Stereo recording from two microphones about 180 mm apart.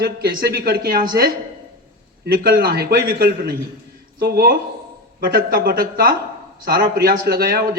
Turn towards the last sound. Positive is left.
turn(degrees=-60)  # may be behind; listen again after turning